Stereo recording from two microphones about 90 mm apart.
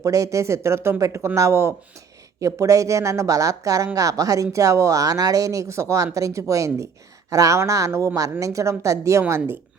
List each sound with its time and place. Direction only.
0.0 s speech: 40° right (ahead or behind)